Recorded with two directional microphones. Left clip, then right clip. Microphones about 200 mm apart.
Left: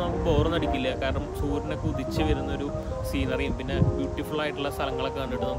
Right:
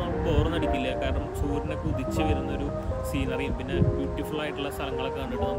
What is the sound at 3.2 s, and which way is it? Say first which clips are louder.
Speech: left 3 dB; 15° left (ahead or behind).